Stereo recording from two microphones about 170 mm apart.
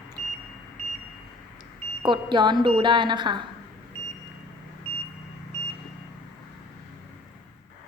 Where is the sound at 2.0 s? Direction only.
25° right (ahead or behind).